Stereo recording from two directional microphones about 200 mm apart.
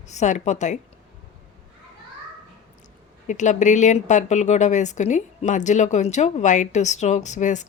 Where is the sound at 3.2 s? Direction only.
40° left (ahead or behind).